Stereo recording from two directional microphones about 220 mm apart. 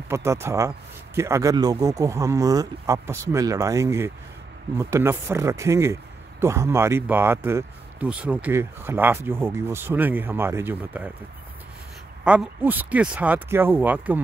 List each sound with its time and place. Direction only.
0.1 s speech: 10° right (ahead or behind)
12.3 s speech: 5° right (ahead or behind)